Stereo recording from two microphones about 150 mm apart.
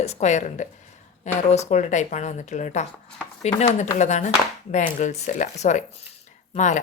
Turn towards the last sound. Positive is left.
turn(degrees=55)  # may be behind; listen again after turning